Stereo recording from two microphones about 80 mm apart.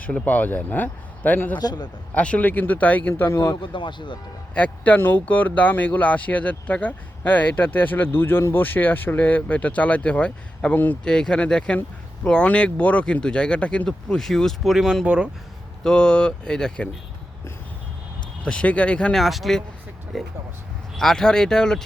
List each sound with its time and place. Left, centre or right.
0.0 s speech: centre
1.5 s a man's voice: left
2.1 s speech: centre
3.5 s a man's voice: left
4.5 s speech: centre
15.8 s speech: centre
18.4 s speech: centre
19.1 s speech: centre